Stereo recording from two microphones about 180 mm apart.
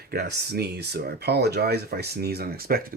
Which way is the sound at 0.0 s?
60° right (ahead or behind).